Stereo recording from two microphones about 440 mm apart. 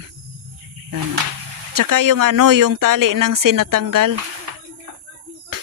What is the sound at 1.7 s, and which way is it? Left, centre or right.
Speech, right.